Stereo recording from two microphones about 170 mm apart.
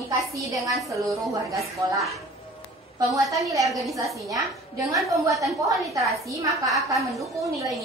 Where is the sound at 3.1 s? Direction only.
20° right (ahead or behind).